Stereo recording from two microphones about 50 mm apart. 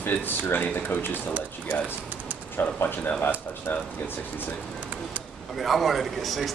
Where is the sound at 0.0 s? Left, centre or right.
Left.